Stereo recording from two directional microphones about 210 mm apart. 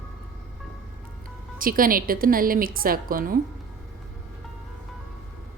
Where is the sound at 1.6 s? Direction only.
40° right (ahead or behind).